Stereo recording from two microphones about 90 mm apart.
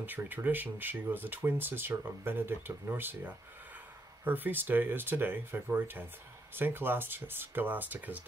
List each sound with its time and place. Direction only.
0.0 s speech: 20° right (ahead or behind)